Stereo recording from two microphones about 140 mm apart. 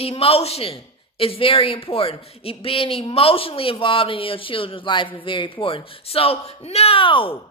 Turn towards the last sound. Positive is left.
turn(degrees=40)  # may be behind; listen again after turning